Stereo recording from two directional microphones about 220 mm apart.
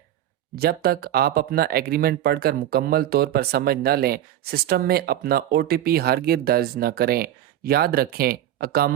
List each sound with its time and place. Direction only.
0.5 s speech: 45° right (ahead or behind)